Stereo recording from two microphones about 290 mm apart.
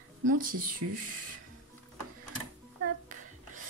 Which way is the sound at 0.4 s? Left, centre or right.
Right.